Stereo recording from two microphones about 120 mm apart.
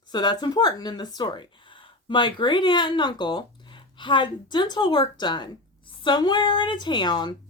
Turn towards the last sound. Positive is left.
turn(degrees=40)  # may be behind; listen again after turning